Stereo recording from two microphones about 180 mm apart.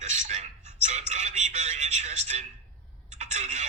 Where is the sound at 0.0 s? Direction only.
40° right (ahead or behind).